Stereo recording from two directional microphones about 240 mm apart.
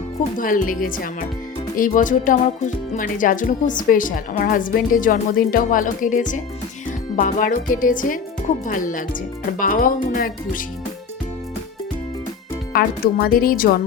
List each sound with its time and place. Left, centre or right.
0.3 s speech: left
12.7 s speech: left